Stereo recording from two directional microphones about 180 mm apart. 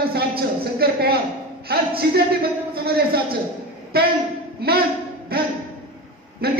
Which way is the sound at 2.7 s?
60° right (ahead or behind).